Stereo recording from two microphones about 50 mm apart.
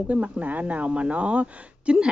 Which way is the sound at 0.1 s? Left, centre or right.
Right.